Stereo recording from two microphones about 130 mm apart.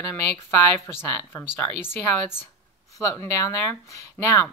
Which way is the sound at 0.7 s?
20° left (ahead or behind).